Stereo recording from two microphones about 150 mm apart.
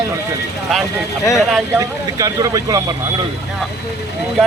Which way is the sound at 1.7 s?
25° right (ahead or behind).